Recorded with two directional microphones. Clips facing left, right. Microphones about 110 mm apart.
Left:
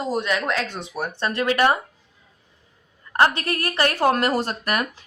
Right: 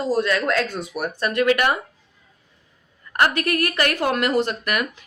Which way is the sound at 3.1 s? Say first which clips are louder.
Even; 30° left (ahead or behind).